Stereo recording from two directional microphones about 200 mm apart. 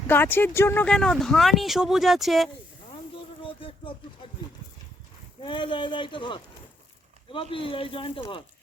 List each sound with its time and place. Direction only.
0.1 s speech: 10° left (ahead or behind)
3.4 s a sound: 25° left (ahead or behind)
5.4 s speech: 25° left (ahead or behind)